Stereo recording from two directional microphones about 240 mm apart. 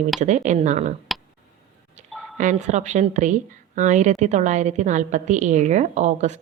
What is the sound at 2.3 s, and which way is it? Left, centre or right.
A woman's voice, right.